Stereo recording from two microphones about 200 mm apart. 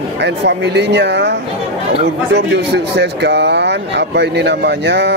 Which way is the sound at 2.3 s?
60° right (ahead or behind).